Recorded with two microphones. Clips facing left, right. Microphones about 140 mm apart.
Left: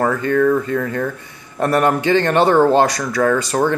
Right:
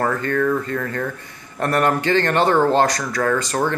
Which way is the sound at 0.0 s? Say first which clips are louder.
Left 4 dB; 10° left (ahead or behind).